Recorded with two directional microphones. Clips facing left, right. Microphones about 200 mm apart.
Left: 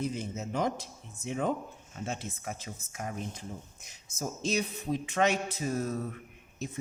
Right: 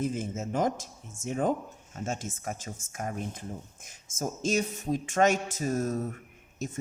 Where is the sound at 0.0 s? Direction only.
50° right (ahead or behind).